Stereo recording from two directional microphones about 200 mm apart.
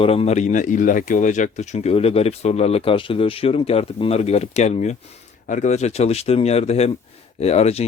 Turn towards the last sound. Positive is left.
turn(degrees=30)  # may be behind; listen again after turning